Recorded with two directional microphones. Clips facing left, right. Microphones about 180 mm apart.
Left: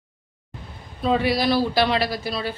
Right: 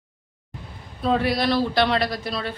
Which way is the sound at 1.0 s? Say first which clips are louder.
Left 1 dB; centre (ahead or behind).